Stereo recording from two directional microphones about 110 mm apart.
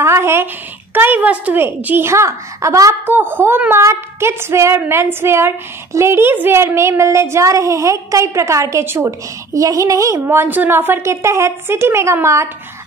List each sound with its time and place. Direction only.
0.0 s a woman's voice: 25° right (ahead or behind)